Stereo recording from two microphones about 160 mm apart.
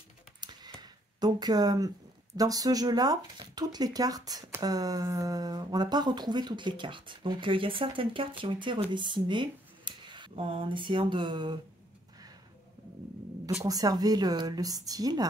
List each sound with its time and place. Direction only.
0.4 s a sound: 25° right (ahead or behind)
2.3 s speech: 20° right (ahead or behind)
13.7 s speech: 25° right (ahead or behind)